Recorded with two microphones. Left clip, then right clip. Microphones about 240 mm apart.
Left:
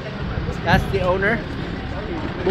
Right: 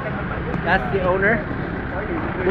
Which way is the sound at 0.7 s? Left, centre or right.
Centre.